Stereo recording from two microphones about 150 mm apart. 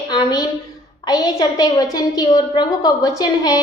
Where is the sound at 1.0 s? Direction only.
25° left (ahead or behind).